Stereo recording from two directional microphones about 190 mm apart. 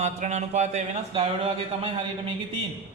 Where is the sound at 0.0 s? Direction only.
40° right (ahead or behind).